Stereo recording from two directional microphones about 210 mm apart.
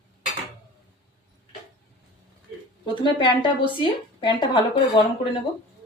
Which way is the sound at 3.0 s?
20° left (ahead or behind).